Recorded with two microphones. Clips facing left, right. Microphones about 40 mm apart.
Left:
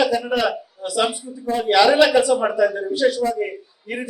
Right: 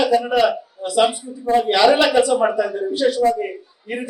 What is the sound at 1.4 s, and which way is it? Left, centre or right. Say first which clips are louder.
Speech: even; right.